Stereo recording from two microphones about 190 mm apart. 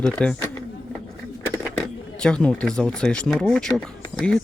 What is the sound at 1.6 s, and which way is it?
Speech, 5° left (ahead or behind).